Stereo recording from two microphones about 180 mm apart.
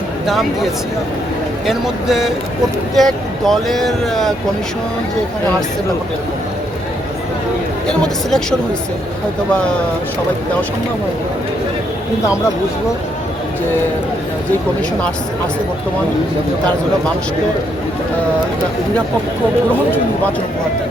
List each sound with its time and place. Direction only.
0.3 s speech: centre (ahead or behind)
7.9 s speech: 5° left (ahead or behind)